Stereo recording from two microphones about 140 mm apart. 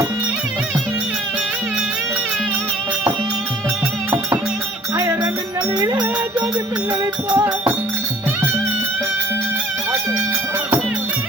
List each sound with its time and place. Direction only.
4.9 s music: 15° right (ahead or behind)
7.3 s music: 15° right (ahead or behind)